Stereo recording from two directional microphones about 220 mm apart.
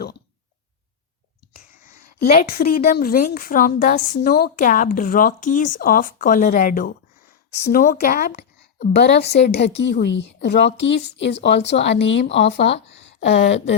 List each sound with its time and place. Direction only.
2.1 s a woman's voice: 45° left (ahead or behind)
9.0 s a woman's voice: 50° left (ahead or behind)